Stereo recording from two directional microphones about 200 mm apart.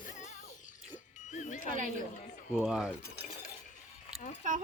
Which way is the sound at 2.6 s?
Centre (ahead or behind).